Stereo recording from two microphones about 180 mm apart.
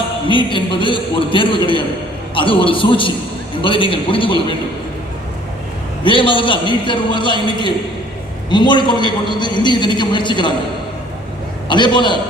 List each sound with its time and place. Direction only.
0.3 s a man's voice: 25° left (ahead or behind)
6.0 s a man's voice: 30° left (ahead or behind)
11.7 s a man's voice: 25° left (ahead or behind)